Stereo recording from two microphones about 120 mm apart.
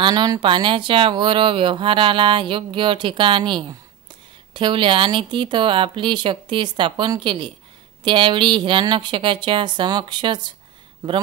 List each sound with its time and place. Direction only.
0.0 s speech: 35° right (ahead or behind)